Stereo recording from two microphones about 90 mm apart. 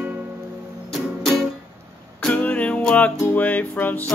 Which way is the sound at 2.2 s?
15° left (ahead or behind).